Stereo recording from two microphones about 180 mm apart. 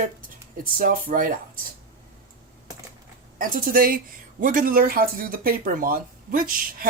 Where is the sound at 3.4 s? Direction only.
50° right (ahead or behind).